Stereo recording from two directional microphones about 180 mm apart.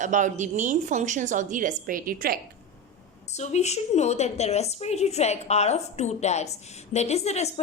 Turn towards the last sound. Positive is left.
turn(degrees=35)  # may be behind; listen again after turning